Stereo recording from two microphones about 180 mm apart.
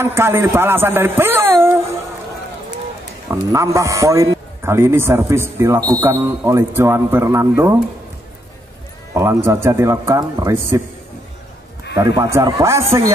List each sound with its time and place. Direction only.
0.0 s a man's voice: 15° right (ahead or behind)
3.3 s a man's voice: 15° right (ahead or behind)
9.1 s a man's voice: 15° right (ahead or behind)
12.0 s a man's voice: 15° right (ahead or behind)